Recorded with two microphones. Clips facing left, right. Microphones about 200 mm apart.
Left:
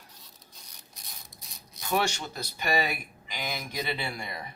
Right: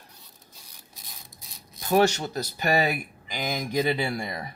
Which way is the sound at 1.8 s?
40° right (ahead or behind).